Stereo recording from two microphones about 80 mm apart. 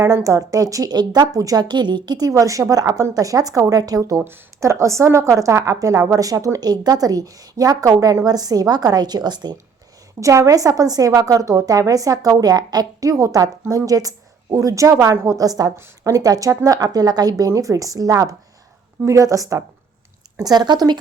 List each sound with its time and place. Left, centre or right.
0.3 s a woman's voice: right
2.3 s a woman's voice: right
4.2 s a woman's voice: right
10.2 s a woman's voice: right
20.4 s a woman's voice: right